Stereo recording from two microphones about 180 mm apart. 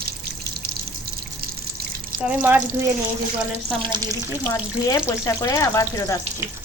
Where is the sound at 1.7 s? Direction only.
55° right (ahead or behind).